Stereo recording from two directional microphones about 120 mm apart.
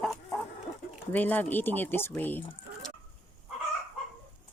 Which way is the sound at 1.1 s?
15° left (ahead or behind).